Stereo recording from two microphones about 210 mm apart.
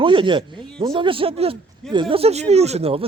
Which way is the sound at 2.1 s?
30° right (ahead or behind).